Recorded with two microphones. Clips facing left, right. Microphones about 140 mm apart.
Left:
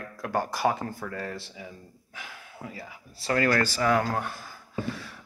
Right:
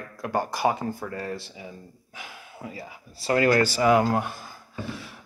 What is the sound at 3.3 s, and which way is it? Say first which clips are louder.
Speech: right 4 dB; 20° right (ahead or behind).